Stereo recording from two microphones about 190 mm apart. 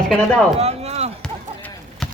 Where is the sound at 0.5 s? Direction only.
35° right (ahead or behind).